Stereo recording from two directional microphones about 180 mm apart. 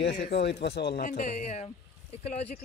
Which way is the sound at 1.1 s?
40° left (ahead or behind).